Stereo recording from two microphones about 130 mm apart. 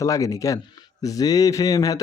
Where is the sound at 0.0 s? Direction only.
25° left (ahead or behind).